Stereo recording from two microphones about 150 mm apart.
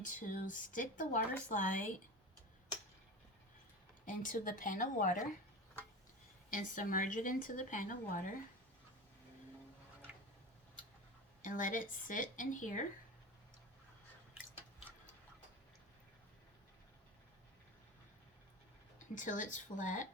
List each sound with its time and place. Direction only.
0.0 s speech: 60° left (ahead or behind)
4.0 s speech: 60° left (ahead or behind)
6.5 s speech: 65° left (ahead or behind)
11.4 s speech: 60° left (ahead or behind)
19.1 s speech: 55° left (ahead or behind)